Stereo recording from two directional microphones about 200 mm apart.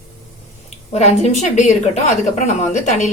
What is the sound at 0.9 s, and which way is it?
Speech, 35° left (ahead or behind).